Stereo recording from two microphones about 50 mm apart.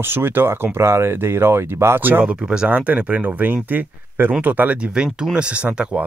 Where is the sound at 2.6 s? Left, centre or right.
Right.